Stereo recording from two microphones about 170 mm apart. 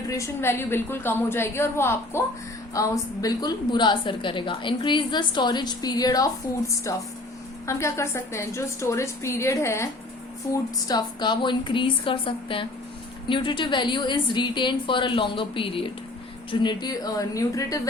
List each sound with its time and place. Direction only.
0.1 s a woman's voice: 15° left (ahead or behind)